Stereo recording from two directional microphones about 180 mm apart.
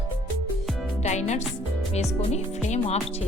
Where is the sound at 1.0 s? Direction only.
40° left (ahead or behind).